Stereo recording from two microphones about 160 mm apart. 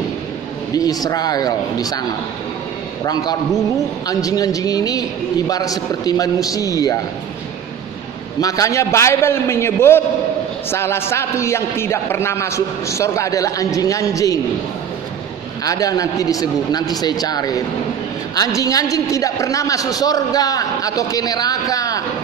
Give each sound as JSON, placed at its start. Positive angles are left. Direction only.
{"t": 0.7, "sound": "a man's voice", "side_deg": 25}
{"t": 8.4, "sound": "a man's voice", "side_deg": 20}
{"t": 15.6, "sound": "a man's voice", "side_deg": 20}